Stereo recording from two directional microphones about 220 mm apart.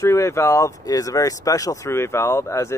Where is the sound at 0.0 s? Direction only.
15° left (ahead or behind).